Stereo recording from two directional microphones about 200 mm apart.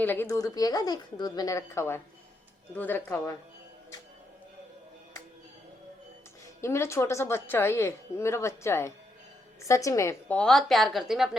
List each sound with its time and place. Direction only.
0.0 s a woman's voice: 10° left (ahead or behind)
6.6 s a woman's voice: 15° left (ahead or behind)